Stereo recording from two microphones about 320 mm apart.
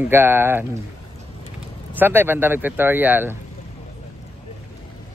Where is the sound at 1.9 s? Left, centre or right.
Centre.